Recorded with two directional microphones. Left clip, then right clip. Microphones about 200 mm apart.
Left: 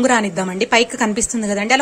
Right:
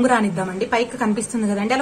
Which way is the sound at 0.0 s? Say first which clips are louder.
Left 2 dB; 35° left (ahead or behind).